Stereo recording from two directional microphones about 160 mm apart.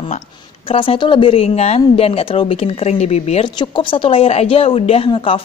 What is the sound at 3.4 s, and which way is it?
A woman's voice, 30° left (ahead or behind).